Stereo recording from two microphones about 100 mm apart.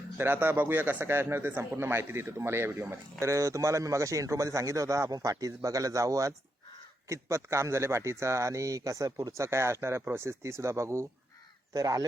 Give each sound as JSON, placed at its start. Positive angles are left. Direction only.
{"t": 0.2, "sound": "a man's voice", "side_deg": -20}